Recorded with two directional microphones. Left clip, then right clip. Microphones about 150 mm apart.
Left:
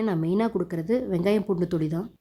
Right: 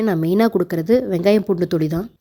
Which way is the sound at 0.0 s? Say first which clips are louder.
Right 8 dB; 35° right (ahead or behind).